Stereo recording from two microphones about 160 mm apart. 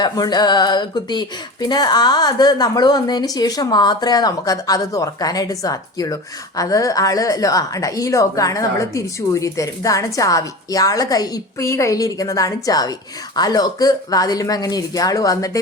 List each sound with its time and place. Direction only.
0.0 s a woman's voice: 25° left (ahead or behind)